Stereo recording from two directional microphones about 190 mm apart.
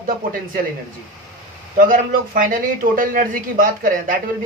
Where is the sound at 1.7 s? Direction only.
45° right (ahead or behind).